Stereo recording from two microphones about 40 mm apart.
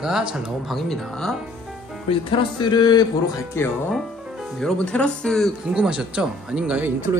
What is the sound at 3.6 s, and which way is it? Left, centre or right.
Speech, left.